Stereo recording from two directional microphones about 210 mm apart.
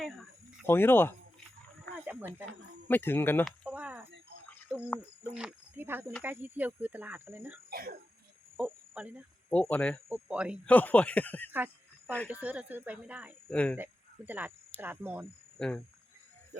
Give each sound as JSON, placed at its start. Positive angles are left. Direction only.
{"t": 0.0, "sound": "cricket", "side_deg": 5}
{"t": 2.8, "sound": "speech", "side_deg": 10}
{"t": 3.7, "sound": "a sound", "side_deg": -5}
{"t": 4.9, "sound": "speech", "side_deg": -5}
{"t": 7.7, "sound": "speech", "side_deg": -45}
{"t": 8.5, "sound": "cricket", "side_deg": -10}
{"t": 9.5, "sound": "speech", "side_deg": 5}
{"t": 10.1, "sound": "speech", "side_deg": -10}
{"t": 10.7, "sound": "speech", "side_deg": 5}
{"t": 11.5, "sound": "a sound", "side_deg": -10}
{"t": 12.3, "sound": "speech", "side_deg": -5}
{"t": 13.5, "sound": "speech", "side_deg": 5}
{"t": 13.7, "sound": "speech", "side_deg": -10}
{"t": 15.5, "sound": "speech", "side_deg": 5}